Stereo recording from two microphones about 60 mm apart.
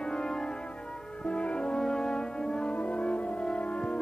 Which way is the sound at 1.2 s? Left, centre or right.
Centre.